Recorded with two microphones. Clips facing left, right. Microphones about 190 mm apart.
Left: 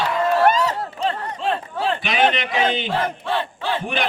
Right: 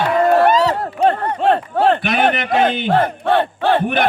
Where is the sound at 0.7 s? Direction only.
55° right (ahead or behind).